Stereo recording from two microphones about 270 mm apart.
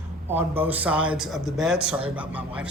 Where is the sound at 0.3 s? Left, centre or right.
Centre.